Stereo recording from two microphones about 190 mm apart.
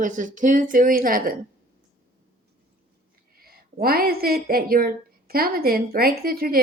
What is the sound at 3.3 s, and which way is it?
A woman's voice, 50° right (ahead or behind).